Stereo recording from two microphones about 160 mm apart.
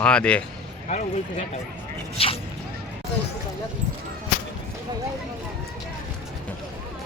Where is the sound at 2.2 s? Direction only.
35° left (ahead or behind).